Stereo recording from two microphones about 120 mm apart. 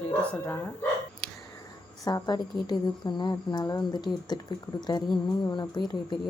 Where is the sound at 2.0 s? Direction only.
30° left (ahead or behind).